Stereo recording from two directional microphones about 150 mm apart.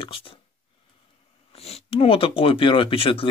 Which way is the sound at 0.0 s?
35° left (ahead or behind).